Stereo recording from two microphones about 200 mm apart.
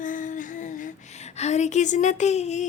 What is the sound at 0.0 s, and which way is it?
Humming, 40° left (ahead or behind).